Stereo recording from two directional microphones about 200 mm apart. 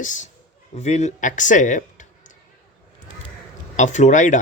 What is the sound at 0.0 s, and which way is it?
Speech, 40° left (ahead or behind).